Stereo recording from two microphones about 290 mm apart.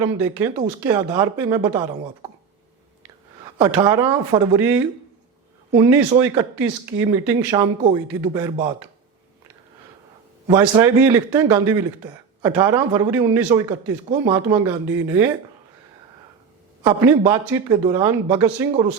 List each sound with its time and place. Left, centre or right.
0.3 s speech: centre
3.6 s speech: centre
10.4 s speech: centre
16.8 s speech: centre